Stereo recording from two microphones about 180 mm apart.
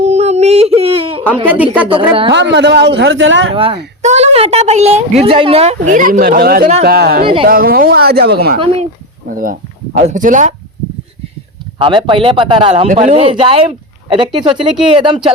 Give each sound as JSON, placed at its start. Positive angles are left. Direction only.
{"t": 0.0, "sound": "a sound", "side_deg": -35}
{"t": 1.5, "sound": "a woman's voice", "side_deg": -10}
{"t": 2.3, "sound": "a man's voice", "side_deg": -75}
{"t": 3.5, "sound": "speech", "side_deg": -30}
{"t": 8.5, "sound": "speech", "side_deg": -30}
{"t": 9.3, "sound": "speech", "side_deg": -50}
{"t": 11.8, "sound": "speech", "side_deg": -25}